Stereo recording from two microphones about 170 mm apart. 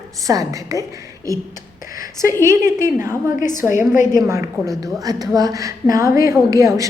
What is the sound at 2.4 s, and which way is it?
A woman's voice, 15° right (ahead or behind).